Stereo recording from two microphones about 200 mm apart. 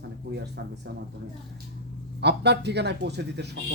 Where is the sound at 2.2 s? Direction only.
55° right (ahead or behind).